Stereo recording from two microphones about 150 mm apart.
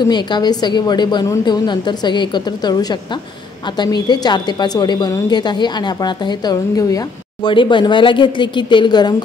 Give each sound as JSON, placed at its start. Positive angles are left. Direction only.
{"t": 0.1, "sound": "a woman's voice", "side_deg": 30}